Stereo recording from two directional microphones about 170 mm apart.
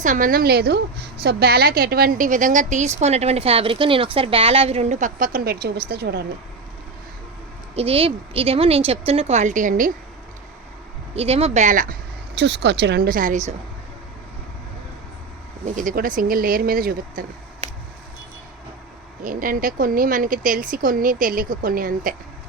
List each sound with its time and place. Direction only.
0.0 s a woman's voice: 50° right (ahead or behind); by 6.2 s 70° right (ahead or behind)
7.8 s speech: 35° right (ahead or behind); by 9.9 s 50° right (ahead or behind)
11.1 s speech: 35° right (ahead or behind)
12.3 s speech: 85° right; by 13.6 s 45° right (ahead or behind)
15.6 s speech: 50° right (ahead or behind)
19.2 s a woman's voice: 55° right (ahead or behind)